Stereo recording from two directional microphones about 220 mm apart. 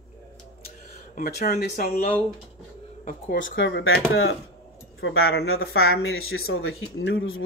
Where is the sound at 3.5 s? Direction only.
55° left (ahead or behind).